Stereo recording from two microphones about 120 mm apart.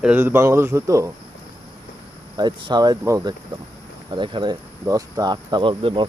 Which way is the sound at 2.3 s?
35° right (ahead or behind).